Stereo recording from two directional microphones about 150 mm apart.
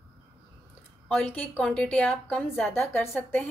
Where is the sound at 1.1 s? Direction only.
10° left (ahead or behind).